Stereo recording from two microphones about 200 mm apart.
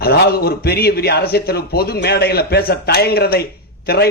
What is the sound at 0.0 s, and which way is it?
A man's voice, 50° left (ahead or behind).